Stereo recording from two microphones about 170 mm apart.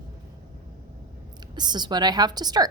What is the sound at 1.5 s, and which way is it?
A woman's voice, 25° right (ahead or behind).